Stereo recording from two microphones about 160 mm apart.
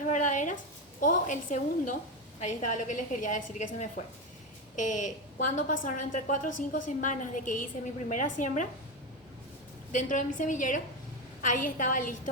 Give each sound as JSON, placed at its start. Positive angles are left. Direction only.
{"t": 0.0, "sound": "a woman's voice", "side_deg": 50}
{"t": 9.9, "sound": "a woman's voice", "side_deg": 50}